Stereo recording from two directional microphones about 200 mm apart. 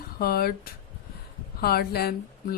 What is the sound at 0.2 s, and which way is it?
A woman's voice, 50° left (ahead or behind).